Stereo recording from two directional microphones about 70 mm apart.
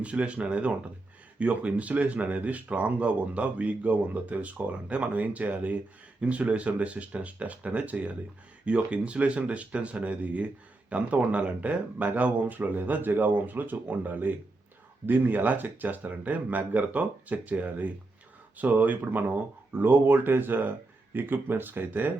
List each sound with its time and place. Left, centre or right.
0.0 s speech: centre